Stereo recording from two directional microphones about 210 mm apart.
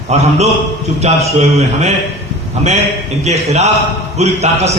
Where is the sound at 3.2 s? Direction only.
30° right (ahead or behind).